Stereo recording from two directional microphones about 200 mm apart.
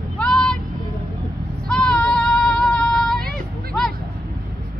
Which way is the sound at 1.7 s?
5° left (ahead or behind).